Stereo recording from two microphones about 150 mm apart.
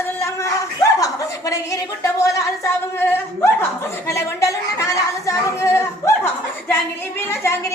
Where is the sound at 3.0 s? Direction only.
15° left (ahead or behind).